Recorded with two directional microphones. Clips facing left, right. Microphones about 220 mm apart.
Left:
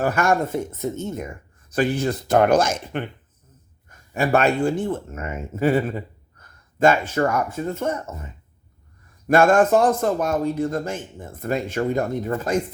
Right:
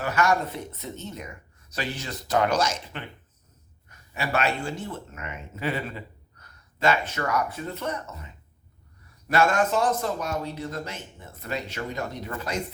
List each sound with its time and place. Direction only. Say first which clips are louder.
0.0 s a man's voice: left 4 dB; 50° left (ahead or behind)
6.4 s a sound: left 7 dB; 50° left (ahead or behind)
7.3 s a man's voice: left 5 dB; 45° left (ahead or behind)